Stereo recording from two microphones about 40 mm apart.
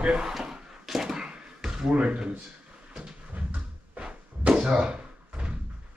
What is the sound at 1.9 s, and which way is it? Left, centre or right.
Speech, right.